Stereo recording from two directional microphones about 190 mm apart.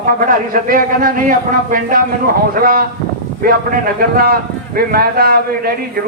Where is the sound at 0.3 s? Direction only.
45° right (ahead or behind).